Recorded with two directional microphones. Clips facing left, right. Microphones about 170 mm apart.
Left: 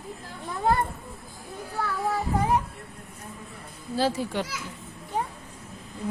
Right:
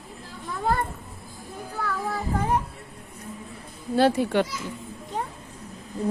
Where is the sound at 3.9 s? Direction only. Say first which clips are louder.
Right 6 dB; 60° right (ahead or behind).